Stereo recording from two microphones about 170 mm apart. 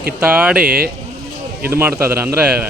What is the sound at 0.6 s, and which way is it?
Speech, 60° right (ahead or behind).